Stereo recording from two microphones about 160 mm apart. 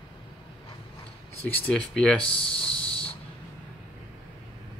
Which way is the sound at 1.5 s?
10° left (ahead or behind).